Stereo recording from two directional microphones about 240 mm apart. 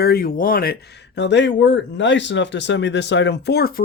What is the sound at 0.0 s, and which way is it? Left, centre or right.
Speech, left.